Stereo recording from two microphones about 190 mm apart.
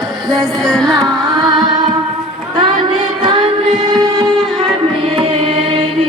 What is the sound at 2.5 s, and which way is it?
Child singing, 25° right (ahead or behind).